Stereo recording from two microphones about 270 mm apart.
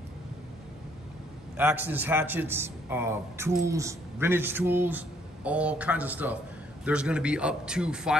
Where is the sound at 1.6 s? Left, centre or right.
Centre.